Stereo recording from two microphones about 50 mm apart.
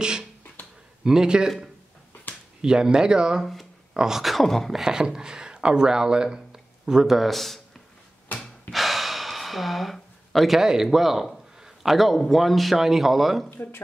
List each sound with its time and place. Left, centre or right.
0.0 s speech: centre
2.6 s speech: centre
4.8 s speech: centre
8.7 s gasp: centre
10.6 s a man's voice: centre
13.5 s speech: left